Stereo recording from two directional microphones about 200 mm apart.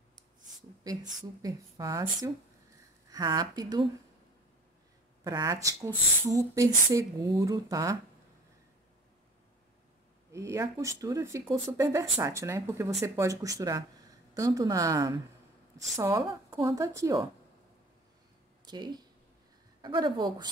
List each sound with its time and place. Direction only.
1.4 s speech: 15° right (ahead or behind)
5.2 s speech: 15° right (ahead or behind)
10.3 s speech: 15° right (ahead or behind)
18.7 s speech: 20° right (ahead or behind)